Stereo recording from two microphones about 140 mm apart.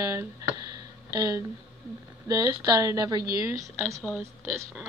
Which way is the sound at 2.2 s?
25° right (ahead or behind).